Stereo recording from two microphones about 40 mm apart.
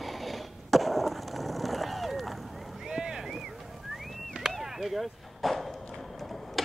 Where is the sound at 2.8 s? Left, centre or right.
Centre.